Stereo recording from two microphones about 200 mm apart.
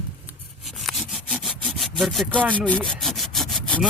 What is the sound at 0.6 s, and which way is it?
Sawing, centre (ahead or behind).